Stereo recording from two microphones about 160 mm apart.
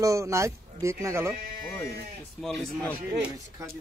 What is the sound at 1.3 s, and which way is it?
Speech, 65° right (ahead or behind).